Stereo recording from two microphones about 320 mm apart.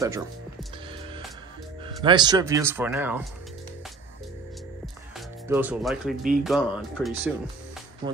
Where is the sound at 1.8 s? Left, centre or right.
Centre.